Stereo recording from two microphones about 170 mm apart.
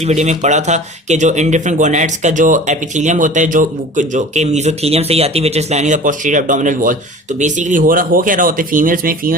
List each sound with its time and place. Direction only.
0.0 s speech: 40° right (ahead or behind)